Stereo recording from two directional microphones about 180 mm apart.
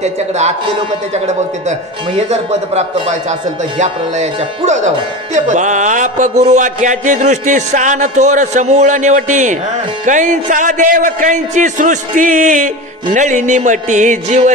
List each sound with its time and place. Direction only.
1.1 s speech: 40° right (ahead or behind)
4.9 s music: 40° right (ahead or behind)